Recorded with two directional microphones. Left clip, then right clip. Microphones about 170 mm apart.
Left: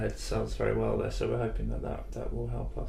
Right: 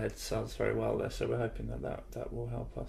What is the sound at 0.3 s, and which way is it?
Speech, 50° right (ahead or behind).